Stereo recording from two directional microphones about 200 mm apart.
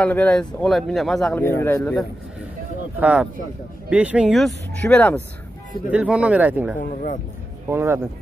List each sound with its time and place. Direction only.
0.0 s a man's voice: 5° left (ahead or behind)
3.0 s speech: 5° right (ahead or behind)
5.9 s speech: 5° right (ahead or behind)
6.8 s speech: 40° left (ahead or behind)
7.7 s speech: 10° right (ahead or behind)